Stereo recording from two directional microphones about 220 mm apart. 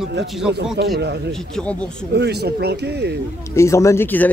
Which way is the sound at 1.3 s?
5° left (ahead or behind).